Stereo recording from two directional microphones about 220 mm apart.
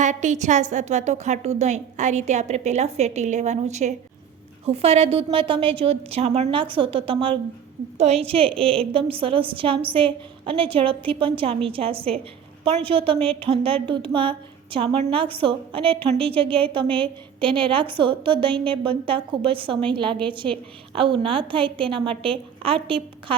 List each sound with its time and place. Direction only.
0.0 s a woman's voice: 35° right (ahead or behind)